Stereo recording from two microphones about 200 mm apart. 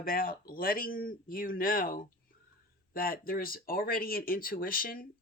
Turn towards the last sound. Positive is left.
turn(degrees=45)  # may be behind; listen again after turning